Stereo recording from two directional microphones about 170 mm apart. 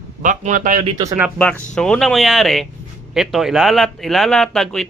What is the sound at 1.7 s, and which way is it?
Speech, 5° left (ahead or behind).